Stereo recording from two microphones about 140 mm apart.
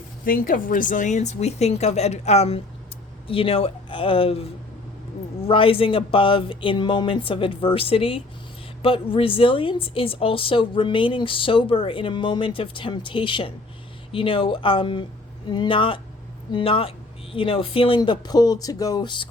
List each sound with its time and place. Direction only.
0.3 s a woman's voice: 90° left; by 19.3 s 35° left (ahead or behind)